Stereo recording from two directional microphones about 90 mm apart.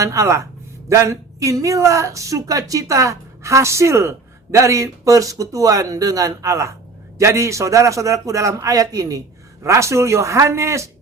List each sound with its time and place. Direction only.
0.0 s speech: 35° right (ahead or behind)